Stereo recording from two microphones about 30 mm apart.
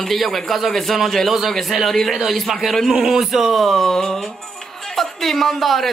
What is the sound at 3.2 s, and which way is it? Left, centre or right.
Speech, centre.